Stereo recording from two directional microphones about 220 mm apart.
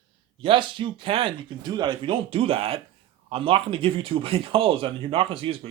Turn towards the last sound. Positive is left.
turn(degrees=-25)  # may be behind; listen again after turning